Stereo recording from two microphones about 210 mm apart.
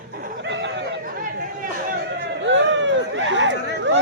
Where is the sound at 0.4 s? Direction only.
60° right (ahead or behind).